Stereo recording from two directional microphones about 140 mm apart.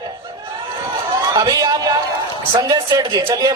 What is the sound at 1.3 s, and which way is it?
Chatter, 25° right (ahead or behind).